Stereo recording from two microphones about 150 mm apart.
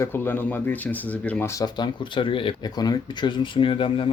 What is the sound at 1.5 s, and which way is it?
Speech, 25° left (ahead or behind).